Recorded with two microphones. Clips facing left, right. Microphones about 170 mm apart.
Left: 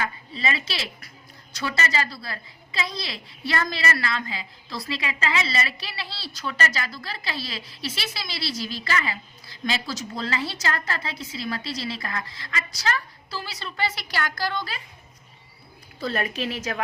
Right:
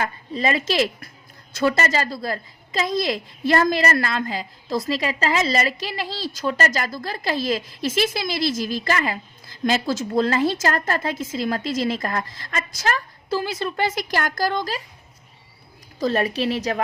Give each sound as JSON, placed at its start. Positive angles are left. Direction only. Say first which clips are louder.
{"t": 0.0, "sound": "a woman's voice", "louder": "right 5 dB", "side_deg": -45}
{"t": 16.0, "sound": "a woman's voice", "louder": "right 6 dB", "side_deg": -40}